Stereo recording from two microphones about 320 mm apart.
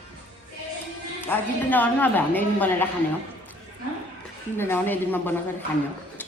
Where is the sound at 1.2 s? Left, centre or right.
Centre.